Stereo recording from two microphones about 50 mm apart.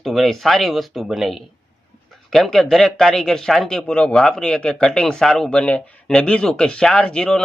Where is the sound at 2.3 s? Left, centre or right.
Centre.